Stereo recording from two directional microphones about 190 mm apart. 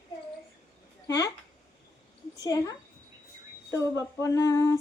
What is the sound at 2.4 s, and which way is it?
Speech, 20° left (ahead or behind).